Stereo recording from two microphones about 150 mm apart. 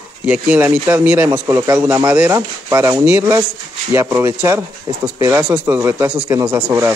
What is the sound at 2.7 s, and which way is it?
A man's voice, 20° right (ahead or behind).